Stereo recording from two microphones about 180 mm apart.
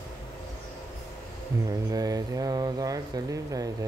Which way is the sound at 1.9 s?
20° right (ahead or behind).